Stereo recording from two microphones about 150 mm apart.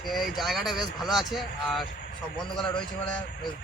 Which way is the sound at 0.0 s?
Centre (ahead or behind).